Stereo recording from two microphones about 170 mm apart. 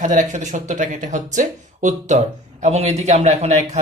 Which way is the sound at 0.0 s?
45° right (ahead or behind).